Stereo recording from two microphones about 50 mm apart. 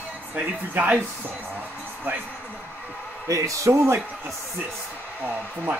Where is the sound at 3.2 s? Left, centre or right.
Right.